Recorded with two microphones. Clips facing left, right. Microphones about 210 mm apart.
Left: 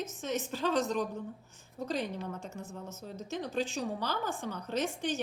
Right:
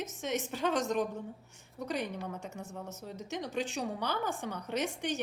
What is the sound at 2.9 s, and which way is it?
A woman's voice, 70° right (ahead or behind).